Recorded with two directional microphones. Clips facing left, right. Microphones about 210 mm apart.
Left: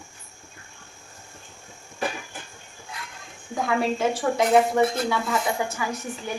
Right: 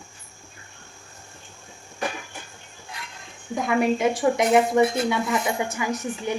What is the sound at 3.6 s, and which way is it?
A woman's voice, 15° right (ahead or behind).